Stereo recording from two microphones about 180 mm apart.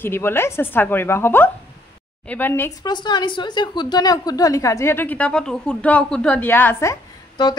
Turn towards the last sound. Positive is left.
turn(degrees=20)  # may be behind; listen again after turning